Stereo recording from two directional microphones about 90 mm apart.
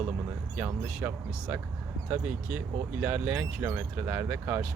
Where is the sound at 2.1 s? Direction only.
15° right (ahead or behind).